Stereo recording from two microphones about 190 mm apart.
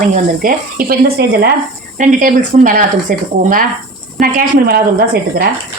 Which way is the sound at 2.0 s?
45° right (ahead or behind).